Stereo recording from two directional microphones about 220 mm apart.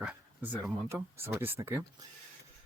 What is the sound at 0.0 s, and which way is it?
Speech, 5° right (ahead or behind).